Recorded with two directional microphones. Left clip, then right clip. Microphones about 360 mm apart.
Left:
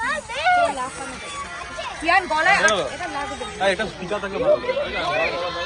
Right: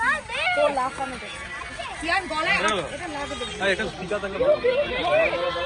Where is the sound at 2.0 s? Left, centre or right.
Left.